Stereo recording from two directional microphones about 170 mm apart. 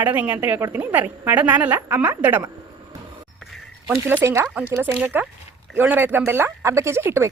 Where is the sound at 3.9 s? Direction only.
10° right (ahead or behind).